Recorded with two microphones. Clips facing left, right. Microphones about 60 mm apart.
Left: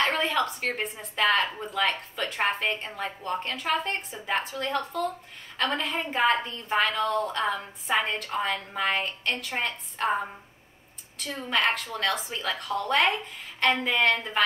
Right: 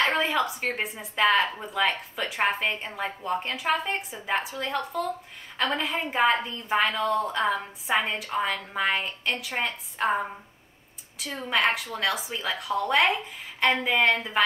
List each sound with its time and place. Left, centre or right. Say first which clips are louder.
0.2 s a woman's voice: right 1 dB; centre